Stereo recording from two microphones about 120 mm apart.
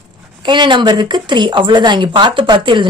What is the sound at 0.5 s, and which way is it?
A woman's voice, 40° right (ahead or behind).